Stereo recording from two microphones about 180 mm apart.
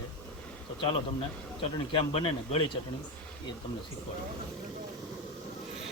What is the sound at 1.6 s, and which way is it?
Speech, 30° left (ahead or behind).